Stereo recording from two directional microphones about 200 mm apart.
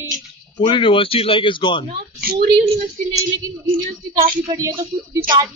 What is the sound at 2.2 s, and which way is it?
Speech, 45° right (ahead or behind).